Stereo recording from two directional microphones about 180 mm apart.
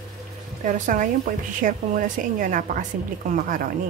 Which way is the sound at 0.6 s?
45° right (ahead or behind).